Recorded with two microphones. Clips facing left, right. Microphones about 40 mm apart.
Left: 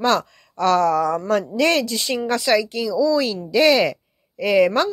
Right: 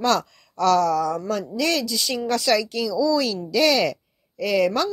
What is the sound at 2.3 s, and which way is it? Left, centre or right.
Speech, centre.